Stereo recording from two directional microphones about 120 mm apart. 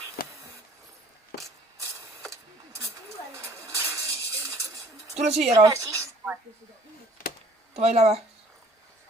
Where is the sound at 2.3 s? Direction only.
25° right (ahead or behind).